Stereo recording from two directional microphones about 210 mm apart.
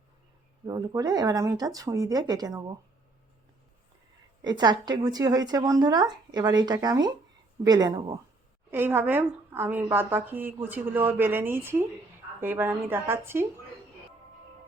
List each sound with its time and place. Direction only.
0.6 s a woman's voice: 15° right (ahead or behind)
4.4 s a woman's voice: 20° right (ahead or behind)